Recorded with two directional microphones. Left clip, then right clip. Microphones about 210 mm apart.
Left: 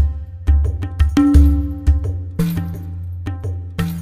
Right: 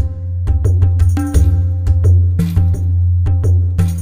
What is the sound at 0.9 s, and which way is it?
Music, 15° left (ahead or behind).